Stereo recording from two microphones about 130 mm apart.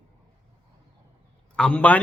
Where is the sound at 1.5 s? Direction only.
10° left (ahead or behind).